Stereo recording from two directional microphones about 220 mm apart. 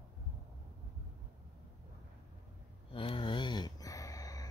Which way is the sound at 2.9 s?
25° left (ahead or behind).